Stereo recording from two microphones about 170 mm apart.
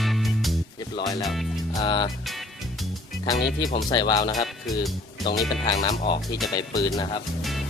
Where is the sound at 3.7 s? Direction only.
25° left (ahead or behind).